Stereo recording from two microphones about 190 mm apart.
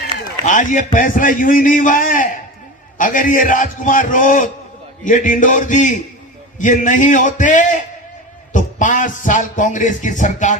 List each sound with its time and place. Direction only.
0.4 s a man's voice: 40° left (ahead or behind)